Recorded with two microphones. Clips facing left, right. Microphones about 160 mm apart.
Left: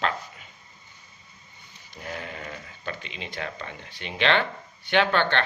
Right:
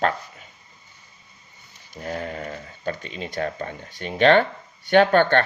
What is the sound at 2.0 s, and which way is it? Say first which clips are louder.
Speech: right 6 dB; 40° right (ahead or behind).